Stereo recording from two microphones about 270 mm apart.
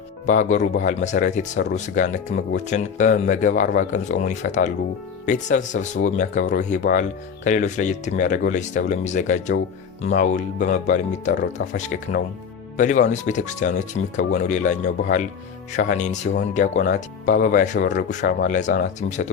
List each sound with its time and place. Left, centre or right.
0.3 s speech: left
11.6 s speech: left
12.7 s speech: left